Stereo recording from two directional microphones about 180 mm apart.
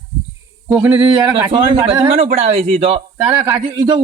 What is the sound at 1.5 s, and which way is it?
Speech, 25° right (ahead or behind).